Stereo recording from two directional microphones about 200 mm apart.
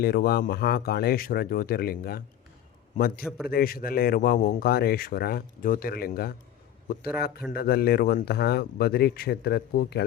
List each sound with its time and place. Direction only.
0.0 s speech: 50° left (ahead or behind)
3.2 s a man's voice: centre (ahead or behind)
3.5 s speech: 45° left (ahead or behind)
7.5 s speech: 50° left (ahead or behind)